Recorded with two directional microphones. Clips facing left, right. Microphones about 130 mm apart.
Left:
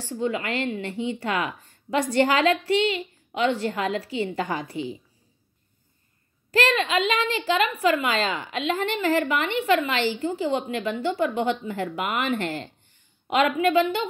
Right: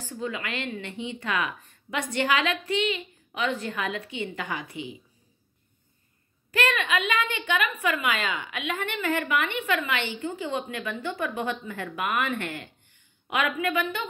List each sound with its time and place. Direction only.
0.0 s a woman's voice: 30° left (ahead or behind)
6.5 s a woman's voice: 30° left (ahead or behind)